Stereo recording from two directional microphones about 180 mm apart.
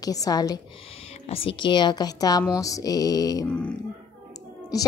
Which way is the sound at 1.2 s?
35° left (ahead or behind).